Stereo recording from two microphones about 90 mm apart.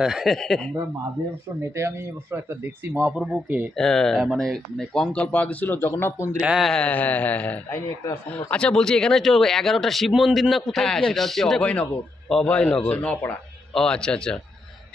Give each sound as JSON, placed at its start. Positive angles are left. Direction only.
{"t": 0.0, "sound": "speech", "side_deg": -5}
{"t": 1.6, "sound": "speech", "side_deg": -30}
{"t": 3.7, "sound": "speech", "side_deg": 5}
{"t": 5.1, "sound": "speech", "side_deg": 15}
{"t": 6.6, "sound": "a man's voice", "side_deg": 10}